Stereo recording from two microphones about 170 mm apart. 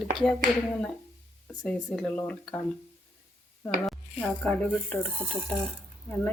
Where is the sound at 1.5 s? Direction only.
5° left (ahead or behind).